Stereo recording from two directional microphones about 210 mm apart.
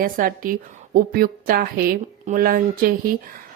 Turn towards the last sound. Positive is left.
turn(degrees=-45)  # may be behind; listen again after turning